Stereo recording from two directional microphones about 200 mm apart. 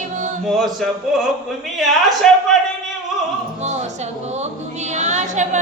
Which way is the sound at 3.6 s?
35° right (ahead or behind).